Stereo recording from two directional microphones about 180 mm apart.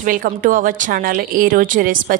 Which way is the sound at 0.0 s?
50° right (ahead or behind).